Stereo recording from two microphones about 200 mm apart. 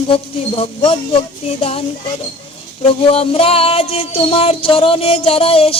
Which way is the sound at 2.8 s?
30° left (ahead or behind).